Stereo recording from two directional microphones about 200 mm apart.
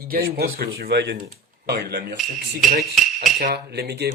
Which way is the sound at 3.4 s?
55° right (ahead or behind).